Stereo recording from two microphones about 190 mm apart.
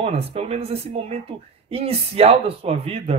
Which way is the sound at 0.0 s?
30° right (ahead or behind).